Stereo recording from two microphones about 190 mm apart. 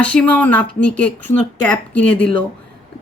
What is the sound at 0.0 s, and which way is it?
Speech, 5° left (ahead or behind).